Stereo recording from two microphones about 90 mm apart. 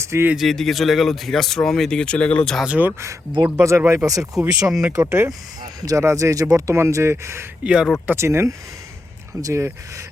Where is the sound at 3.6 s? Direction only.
30° right (ahead or behind).